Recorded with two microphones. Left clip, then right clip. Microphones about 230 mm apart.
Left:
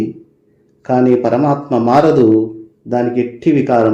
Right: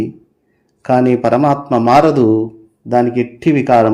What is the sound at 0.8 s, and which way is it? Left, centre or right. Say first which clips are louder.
A man's voice: even; right.